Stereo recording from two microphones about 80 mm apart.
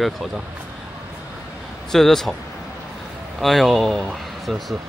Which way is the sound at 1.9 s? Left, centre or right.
Centre.